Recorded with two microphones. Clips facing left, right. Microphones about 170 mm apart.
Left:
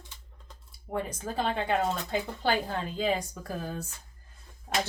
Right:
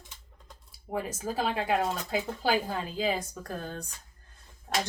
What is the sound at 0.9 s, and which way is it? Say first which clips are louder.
Speech: right 1 dB; 5° right (ahead or behind).